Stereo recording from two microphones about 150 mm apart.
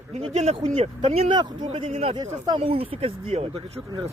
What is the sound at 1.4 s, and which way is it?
Speech, 30° right (ahead or behind).